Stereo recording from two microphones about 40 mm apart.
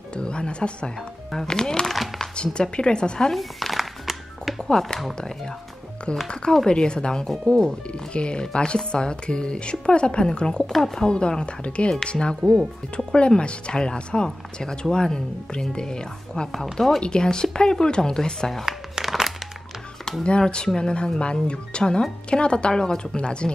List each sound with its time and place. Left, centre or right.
0.1 s speech: left
1.3 s speech: centre
1.9 s speech: centre
2.3 s speech: left
3.3 s music: centre
4.6 s speech: centre
10.7 s speech: centre
11.1 s speech: left
18.7 s a sound: centre
20.2 s speech: left